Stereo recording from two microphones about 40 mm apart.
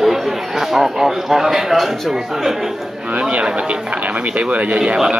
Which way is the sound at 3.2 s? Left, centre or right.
Right.